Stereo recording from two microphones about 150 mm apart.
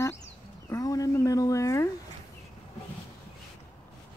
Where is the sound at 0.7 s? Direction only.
25° left (ahead or behind).